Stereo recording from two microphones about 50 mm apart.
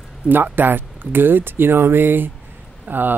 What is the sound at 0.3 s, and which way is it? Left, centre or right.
Speech, right.